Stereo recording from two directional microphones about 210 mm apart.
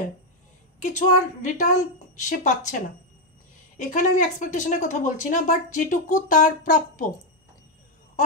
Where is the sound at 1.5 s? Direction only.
35° left (ahead or behind).